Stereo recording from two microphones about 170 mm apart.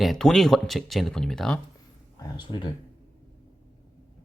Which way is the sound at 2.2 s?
25° left (ahead or behind).